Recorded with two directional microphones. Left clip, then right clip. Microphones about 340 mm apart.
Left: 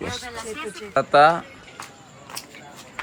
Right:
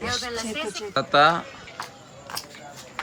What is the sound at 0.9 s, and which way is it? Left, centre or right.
Speech, centre.